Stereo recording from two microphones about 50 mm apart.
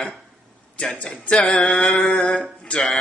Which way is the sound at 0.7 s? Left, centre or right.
Left.